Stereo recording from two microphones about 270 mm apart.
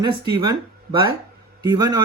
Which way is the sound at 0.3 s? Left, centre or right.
Centre.